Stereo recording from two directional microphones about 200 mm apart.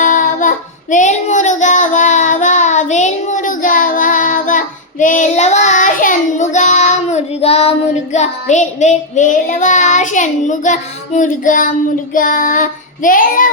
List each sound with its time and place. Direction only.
0.0 s child singing: 40° left (ahead or behind)